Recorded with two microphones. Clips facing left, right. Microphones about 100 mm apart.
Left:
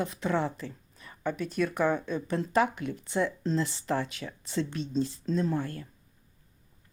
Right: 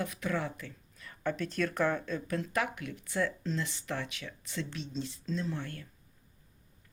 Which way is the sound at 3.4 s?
35° left (ahead or behind).